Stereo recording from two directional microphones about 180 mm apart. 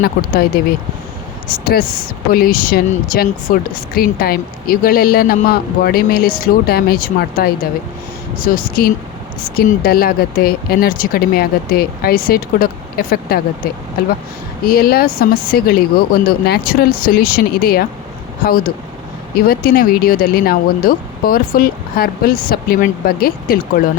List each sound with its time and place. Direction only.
0.2 s speech: 55° left (ahead or behind)
1.5 s speech: 55° left (ahead or behind)
14.6 s speech: 55° left (ahead or behind)